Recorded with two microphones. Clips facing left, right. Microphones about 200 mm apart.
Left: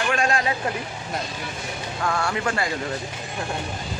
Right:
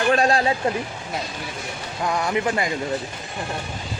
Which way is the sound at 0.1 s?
35° right (ahead or behind).